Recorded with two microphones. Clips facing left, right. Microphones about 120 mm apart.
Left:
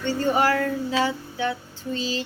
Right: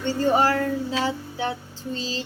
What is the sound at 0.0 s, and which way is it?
Speech, 35° right (ahead or behind).